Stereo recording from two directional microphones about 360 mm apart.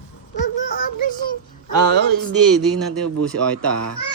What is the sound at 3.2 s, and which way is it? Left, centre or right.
Speech, centre.